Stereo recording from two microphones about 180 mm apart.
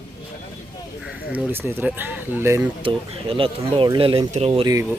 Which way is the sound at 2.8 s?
30° right (ahead or behind).